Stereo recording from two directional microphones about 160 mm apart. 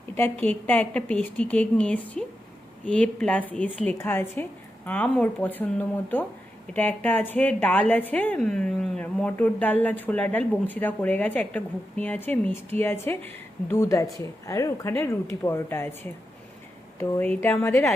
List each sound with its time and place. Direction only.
0.2 s a woman's voice: 10° left (ahead or behind)
17.0 s a woman's voice: 15° left (ahead or behind)